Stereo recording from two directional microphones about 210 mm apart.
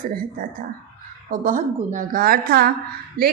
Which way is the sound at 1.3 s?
40° right (ahead or behind).